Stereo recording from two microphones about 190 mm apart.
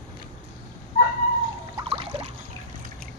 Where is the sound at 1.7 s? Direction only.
30° right (ahead or behind).